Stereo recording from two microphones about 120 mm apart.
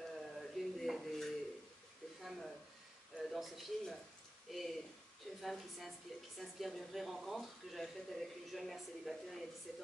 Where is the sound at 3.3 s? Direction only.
Centre (ahead or behind).